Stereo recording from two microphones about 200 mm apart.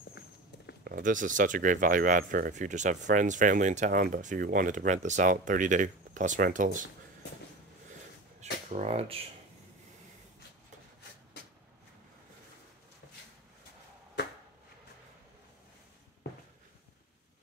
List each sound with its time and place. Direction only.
0.8 s speech: 45° right (ahead or behind)
8.4 s speech: 35° right (ahead or behind)